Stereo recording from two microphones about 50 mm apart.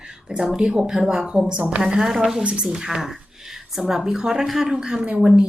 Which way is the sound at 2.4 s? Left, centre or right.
Right.